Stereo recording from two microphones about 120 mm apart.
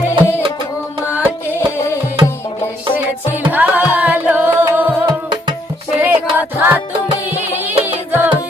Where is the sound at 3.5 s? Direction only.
15° right (ahead or behind).